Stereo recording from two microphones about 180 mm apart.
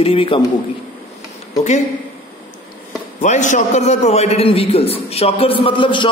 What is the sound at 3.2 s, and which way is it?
A man's voice, 40° left (ahead or behind).